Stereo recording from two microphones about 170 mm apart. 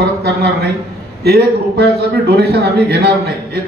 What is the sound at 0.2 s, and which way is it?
A man's voice, 65° right (ahead or behind).